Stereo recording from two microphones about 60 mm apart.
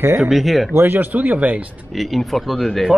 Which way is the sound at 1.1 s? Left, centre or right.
Right.